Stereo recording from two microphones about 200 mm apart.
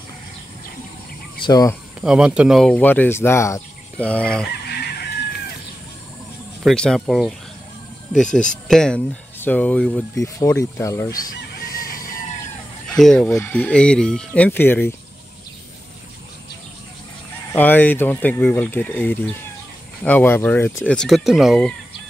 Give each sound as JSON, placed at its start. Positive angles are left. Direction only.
{"t": 1.4, "sound": "speech", "side_deg": 20}
{"t": 2.0, "sound": "speech", "side_deg": -5}
{"t": 4.6, "sound": "chicken", "side_deg": 55}
{"t": 6.6, "sound": "speech", "side_deg": 5}
{"t": 12.8, "sound": "speech", "side_deg": 0}
{"t": 17.6, "sound": "speech", "side_deg": 10}